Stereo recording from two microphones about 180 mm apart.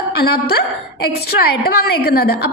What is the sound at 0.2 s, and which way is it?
Speech, 60° left (ahead or behind).